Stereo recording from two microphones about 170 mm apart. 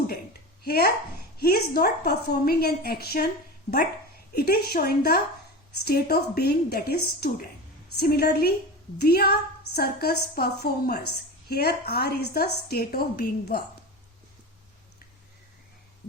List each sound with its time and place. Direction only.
0.6 s a woman's voice: 65° left (ahead or behind)
4.4 s a woman's voice: 65° left (ahead or behind)